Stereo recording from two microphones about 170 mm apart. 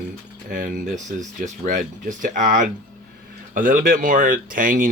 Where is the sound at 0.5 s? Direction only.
55° right (ahead or behind).